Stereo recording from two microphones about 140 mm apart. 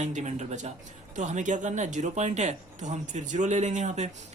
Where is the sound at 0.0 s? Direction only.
55° right (ahead or behind).